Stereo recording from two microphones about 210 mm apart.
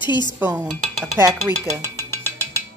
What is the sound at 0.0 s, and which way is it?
Dishes, 20° left (ahead or behind).